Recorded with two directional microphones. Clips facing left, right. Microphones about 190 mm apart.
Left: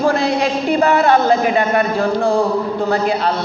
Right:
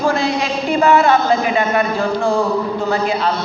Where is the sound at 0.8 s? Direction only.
40° left (ahead or behind).